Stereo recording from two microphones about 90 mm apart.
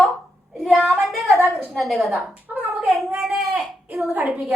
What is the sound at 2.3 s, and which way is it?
Speech, 15° right (ahead or behind).